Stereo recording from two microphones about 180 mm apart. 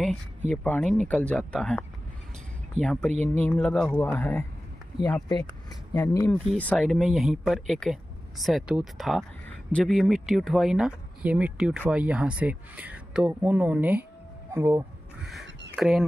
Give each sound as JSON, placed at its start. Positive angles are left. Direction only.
{"t": 0.5, "sound": "speech", "side_deg": 5}
{"t": 6.4, "sound": "speech", "side_deg": 5}
{"t": 14.5, "sound": "vehicle", "side_deg": -15}
{"t": 15.7, "sound": "speech", "side_deg": 0}